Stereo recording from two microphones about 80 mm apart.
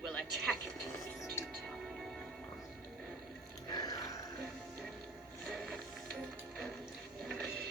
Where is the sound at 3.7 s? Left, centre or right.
Left.